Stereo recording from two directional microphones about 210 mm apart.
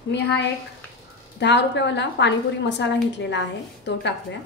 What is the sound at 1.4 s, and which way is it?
A woman's voice, 55° left (ahead or behind).